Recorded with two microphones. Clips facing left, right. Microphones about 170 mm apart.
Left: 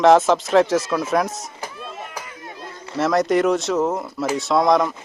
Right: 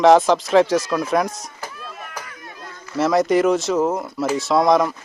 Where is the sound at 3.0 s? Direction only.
Centre (ahead or behind).